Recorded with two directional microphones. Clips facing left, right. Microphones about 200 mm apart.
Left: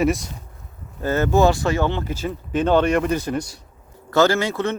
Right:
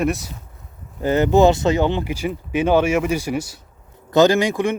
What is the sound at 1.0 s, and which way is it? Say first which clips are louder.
Speech: right 3 dB; 15° right (ahead or behind).